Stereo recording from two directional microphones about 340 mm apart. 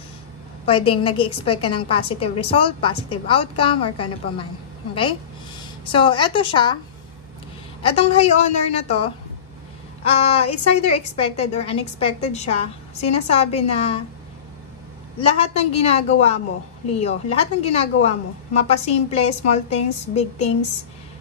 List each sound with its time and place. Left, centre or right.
0.7 s a woman's voice: centre
5.9 s a woman's voice: centre
7.8 s a woman's voice: centre
15.1 s a woman's voice: centre